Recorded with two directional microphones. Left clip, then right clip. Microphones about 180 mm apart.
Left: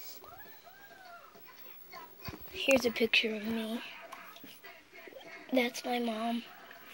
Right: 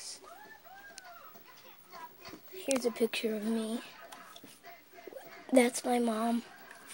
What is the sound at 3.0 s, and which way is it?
Speech, 15° right (ahead or behind).